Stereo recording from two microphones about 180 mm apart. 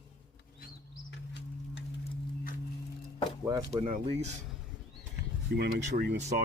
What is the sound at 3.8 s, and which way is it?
Speech, 35° right (ahead or behind).